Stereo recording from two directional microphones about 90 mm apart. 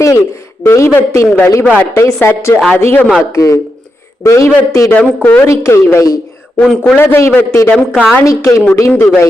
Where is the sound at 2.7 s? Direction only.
20° left (ahead or behind).